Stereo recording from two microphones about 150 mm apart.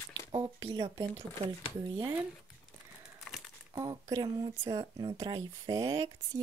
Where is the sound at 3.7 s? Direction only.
25° right (ahead or behind).